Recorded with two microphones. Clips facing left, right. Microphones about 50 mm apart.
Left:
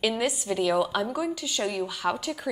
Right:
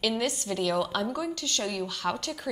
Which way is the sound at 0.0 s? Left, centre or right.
Centre.